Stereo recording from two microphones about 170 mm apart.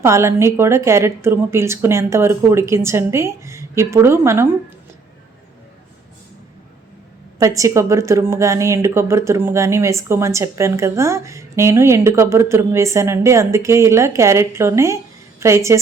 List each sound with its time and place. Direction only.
0.0 s a woman's voice: 15° right (ahead or behind)
7.3 s a woman's voice: 20° right (ahead or behind)